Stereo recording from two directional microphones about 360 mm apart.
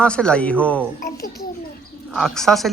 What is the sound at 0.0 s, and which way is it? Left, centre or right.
Speech, centre.